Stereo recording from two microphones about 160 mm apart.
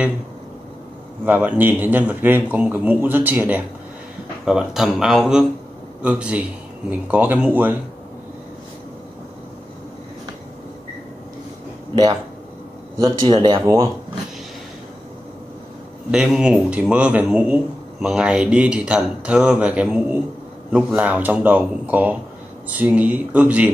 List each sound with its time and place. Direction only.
1.2 s a man's voice: 10° right (ahead or behind)
11.9 s speech: 25° right (ahead or behind)
16.1 s a man's voice: 5° right (ahead or behind)